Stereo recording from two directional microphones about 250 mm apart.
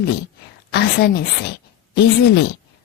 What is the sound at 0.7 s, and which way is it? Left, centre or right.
Speech, left.